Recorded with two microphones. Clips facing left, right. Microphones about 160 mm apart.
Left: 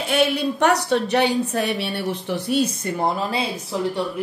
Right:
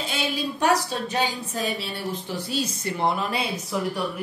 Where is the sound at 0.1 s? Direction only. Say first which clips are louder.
Left 11 dB; 65° left (ahead or behind).